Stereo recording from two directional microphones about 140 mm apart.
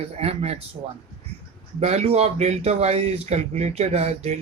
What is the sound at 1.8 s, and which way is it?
Speech, 50° right (ahead or behind).